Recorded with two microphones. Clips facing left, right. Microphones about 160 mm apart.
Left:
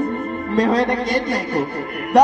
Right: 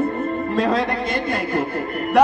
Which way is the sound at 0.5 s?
Centre (ahead or behind).